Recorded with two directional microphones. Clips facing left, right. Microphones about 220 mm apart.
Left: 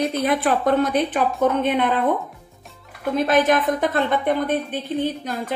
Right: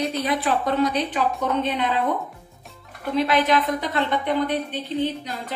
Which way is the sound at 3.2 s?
50° left (ahead or behind).